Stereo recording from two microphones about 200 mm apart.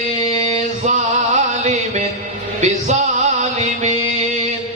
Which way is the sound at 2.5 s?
35° right (ahead or behind).